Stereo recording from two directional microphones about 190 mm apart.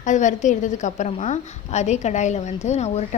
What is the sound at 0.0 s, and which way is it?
A woman's voice, 40° left (ahead or behind).